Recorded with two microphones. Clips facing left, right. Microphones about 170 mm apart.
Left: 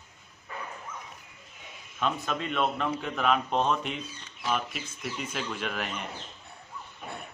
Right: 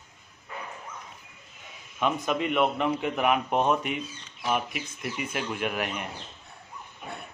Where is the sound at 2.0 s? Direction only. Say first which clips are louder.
Right 4 dB; 15° right (ahead or behind).